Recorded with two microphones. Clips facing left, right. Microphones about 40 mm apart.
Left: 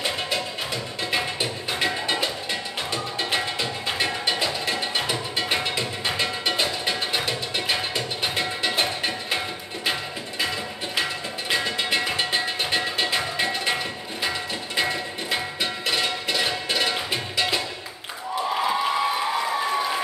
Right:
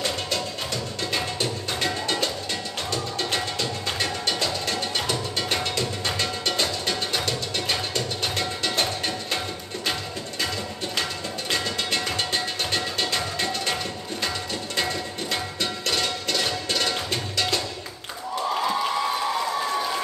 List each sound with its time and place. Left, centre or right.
1.1 s music: centre
11.0 s music: centre
14.8 s music: centre
18.5 s a sound: centre